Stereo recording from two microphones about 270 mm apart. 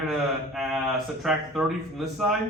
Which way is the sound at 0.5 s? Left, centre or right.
Centre.